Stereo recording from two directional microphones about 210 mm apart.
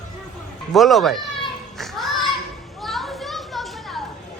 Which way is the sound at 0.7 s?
Centre (ahead or behind).